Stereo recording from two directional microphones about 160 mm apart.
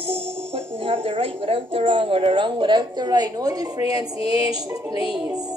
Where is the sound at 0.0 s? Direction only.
35° right (ahead or behind).